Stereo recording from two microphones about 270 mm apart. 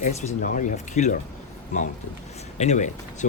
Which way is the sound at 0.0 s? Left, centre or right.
Left.